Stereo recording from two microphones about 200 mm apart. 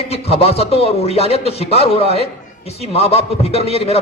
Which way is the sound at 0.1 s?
30° left (ahead or behind).